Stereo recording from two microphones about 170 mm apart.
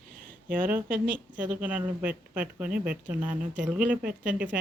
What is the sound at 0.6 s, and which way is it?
Speech, 10° right (ahead or behind).